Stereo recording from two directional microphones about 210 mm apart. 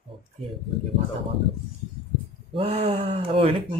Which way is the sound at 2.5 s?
25° right (ahead or behind).